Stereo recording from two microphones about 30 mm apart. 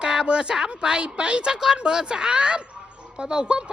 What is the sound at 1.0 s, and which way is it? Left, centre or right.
A woman's voice, right.